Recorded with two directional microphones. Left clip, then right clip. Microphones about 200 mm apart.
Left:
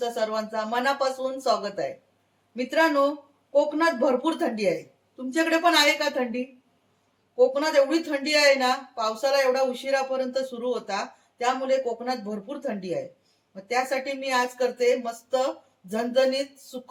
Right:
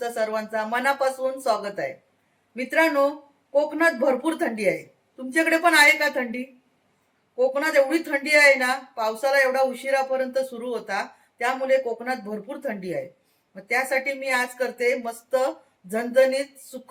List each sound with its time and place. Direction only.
0.0 s speech: centre (ahead or behind)
7.3 s speech: centre (ahead or behind)
13.7 s speech: centre (ahead or behind)